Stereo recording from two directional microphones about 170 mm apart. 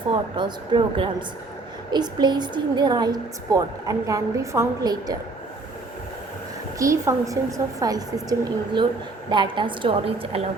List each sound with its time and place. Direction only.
0.1 s a woman's voice: 30° right (ahead or behind)
6.7 s a woman's voice: 20° right (ahead or behind); by 10.4 s 35° right (ahead or behind)